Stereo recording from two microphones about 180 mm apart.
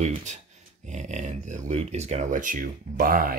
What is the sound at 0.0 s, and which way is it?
Speech, 40° right (ahead or behind).